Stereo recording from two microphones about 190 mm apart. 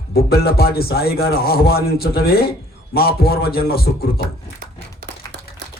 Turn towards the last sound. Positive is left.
turn(degrees=55)  # may be behind; listen again after turning